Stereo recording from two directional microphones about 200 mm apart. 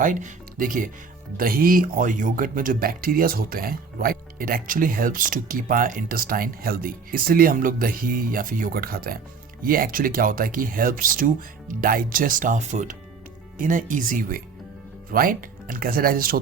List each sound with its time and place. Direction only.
0.0 s speech: 40° right (ahead or behind)